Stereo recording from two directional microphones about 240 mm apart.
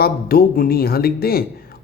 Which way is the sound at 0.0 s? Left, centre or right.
Left.